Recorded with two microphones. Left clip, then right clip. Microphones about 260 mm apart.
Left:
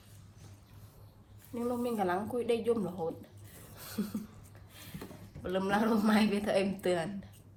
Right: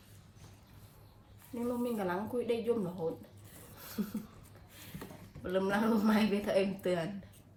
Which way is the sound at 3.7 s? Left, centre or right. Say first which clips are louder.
Left 3 dB; left.